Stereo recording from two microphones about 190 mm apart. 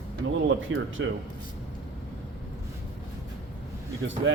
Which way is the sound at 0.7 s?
90° right.